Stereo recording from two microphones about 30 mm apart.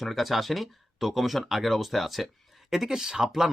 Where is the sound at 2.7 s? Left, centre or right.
Centre.